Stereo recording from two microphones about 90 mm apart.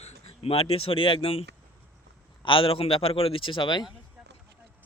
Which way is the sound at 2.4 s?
75° left (ahead or behind).